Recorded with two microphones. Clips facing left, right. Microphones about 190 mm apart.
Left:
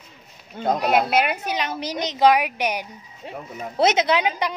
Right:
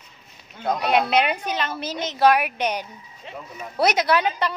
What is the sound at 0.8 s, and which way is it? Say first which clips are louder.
A woman's voice: right 1 dB; 5° left (ahead or behind).